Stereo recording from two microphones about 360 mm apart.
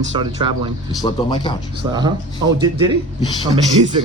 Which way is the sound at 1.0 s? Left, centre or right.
Centre.